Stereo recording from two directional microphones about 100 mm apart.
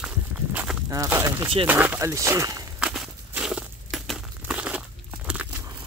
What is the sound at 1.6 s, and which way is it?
Speech, 20° right (ahead or behind).